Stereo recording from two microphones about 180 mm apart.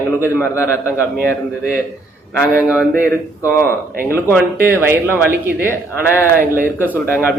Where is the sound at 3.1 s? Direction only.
15° left (ahead or behind).